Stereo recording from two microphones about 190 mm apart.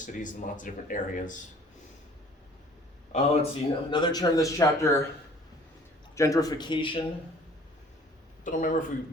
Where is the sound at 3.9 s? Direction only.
20° left (ahead or behind).